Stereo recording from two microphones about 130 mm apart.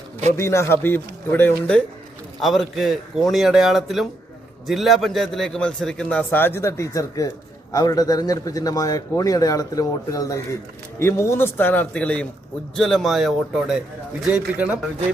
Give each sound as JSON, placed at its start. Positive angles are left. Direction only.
{"t": 0.3, "sound": "a man's voice", "side_deg": 20}
{"t": 2.4, "sound": "a man's voice", "side_deg": 0}